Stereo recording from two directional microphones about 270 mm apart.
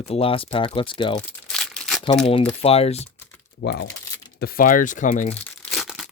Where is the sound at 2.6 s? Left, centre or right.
Left.